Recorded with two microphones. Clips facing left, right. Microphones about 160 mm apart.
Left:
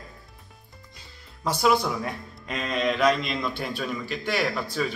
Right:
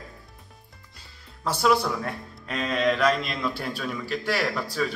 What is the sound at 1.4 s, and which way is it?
Speech, centre (ahead or behind).